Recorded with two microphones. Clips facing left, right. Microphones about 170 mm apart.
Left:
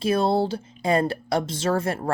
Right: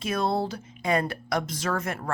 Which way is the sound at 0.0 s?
30° left (ahead or behind).